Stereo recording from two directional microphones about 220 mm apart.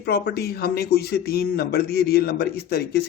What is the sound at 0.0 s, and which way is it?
A man's voice, 50° left (ahead or behind).